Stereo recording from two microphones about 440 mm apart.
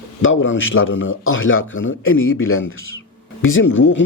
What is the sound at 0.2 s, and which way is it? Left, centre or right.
A man's voice, left.